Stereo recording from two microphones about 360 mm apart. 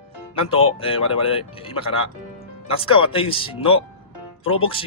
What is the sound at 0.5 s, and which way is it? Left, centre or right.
Speech, centre.